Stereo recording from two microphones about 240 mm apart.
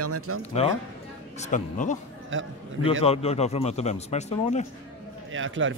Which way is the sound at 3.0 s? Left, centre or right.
Left.